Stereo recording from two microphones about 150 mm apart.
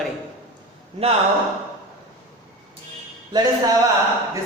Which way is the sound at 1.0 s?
40° right (ahead or behind).